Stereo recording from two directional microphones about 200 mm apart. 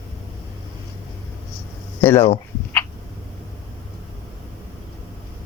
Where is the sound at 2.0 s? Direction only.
10° left (ahead or behind).